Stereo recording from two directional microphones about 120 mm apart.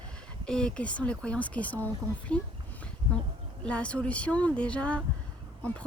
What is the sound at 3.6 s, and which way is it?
Speech, 10° left (ahead or behind).